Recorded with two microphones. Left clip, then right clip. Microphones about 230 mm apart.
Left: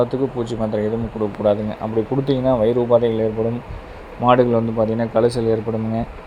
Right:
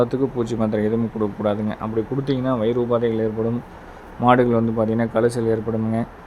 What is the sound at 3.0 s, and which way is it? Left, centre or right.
Speech, centre.